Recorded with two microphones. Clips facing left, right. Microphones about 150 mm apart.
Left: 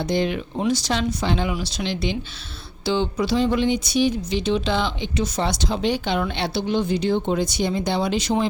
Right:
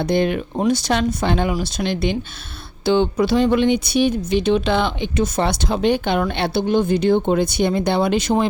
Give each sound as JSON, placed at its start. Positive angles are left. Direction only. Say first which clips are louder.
{"t": 0.0, "sound": "speech", "louder": "right 4 dB", "side_deg": -55}